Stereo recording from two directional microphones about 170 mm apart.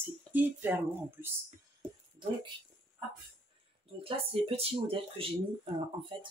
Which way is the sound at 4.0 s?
35° right (ahead or behind).